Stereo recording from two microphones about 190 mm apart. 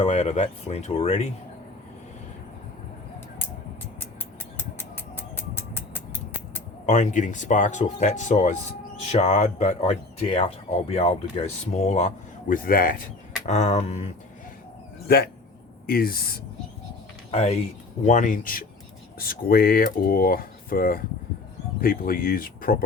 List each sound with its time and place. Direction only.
0.0 s speech: 35° left (ahead or behind)
4.5 s a sound: 10° left (ahead or behind)
6.8 s speech: 40° left (ahead or behind)
13.4 s speech: 35° left (ahead or behind)
15.0 s speech: 55° left (ahead or behind)
17.3 s speech: 35° left (ahead or behind)